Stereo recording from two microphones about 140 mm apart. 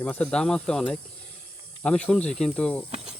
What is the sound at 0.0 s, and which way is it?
Speech, 10° left (ahead or behind).